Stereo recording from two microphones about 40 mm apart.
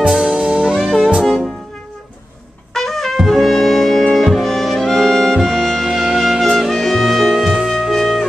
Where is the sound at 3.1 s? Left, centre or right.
Centre.